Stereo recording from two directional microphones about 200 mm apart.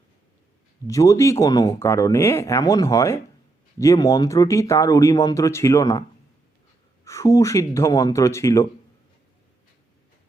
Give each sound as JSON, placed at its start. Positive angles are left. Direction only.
{"t": 0.9, "sound": "speech", "side_deg": 15}